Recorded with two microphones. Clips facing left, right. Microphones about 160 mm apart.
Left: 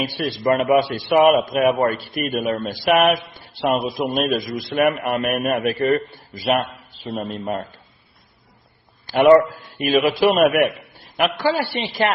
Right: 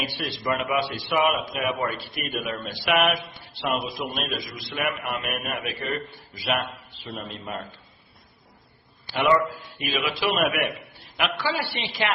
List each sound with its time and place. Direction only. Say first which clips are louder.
0.2 s a man's voice: left 9 dB; 45° left (ahead or behind)
9.0 s a man's voice: left 9 dB; 45° left (ahead or behind)